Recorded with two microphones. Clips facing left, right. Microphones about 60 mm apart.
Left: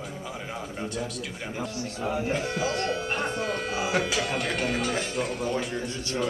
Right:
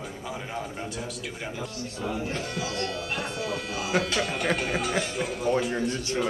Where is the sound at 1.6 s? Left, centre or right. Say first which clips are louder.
Left 2 dB; left.